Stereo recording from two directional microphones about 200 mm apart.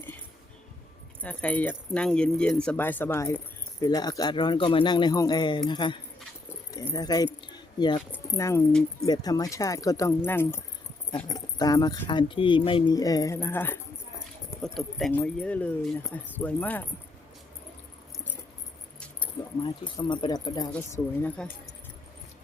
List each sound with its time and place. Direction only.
1.2 s speech: 5° left (ahead or behind)
7.4 s keys jangling: 20° left (ahead or behind)
8.1 s speech: 15° left (ahead or behind)
19.2 s speech: 25° left (ahead or behind)
20.7 s speech: 10° left (ahead or behind)